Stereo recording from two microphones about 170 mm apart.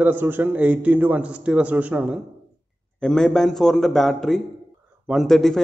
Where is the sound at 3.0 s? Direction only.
5° left (ahead or behind).